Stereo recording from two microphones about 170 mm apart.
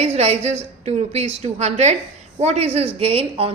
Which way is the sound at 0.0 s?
40° right (ahead or behind).